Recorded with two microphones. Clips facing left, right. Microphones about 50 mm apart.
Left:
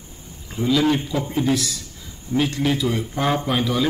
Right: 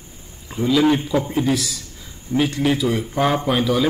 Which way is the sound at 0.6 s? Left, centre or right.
Centre.